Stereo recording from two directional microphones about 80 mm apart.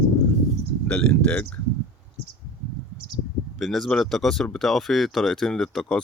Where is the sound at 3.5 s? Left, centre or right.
Centre.